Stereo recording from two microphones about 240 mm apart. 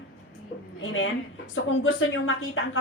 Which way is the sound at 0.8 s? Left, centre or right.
Left.